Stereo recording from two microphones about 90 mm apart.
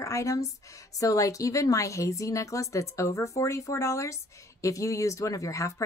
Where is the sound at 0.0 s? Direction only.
35° left (ahead or behind).